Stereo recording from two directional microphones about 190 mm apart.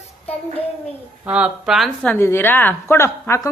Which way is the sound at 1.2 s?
5° right (ahead or behind).